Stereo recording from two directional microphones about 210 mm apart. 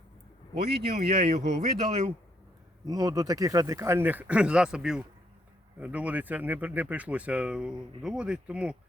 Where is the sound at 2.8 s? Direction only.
15° right (ahead or behind).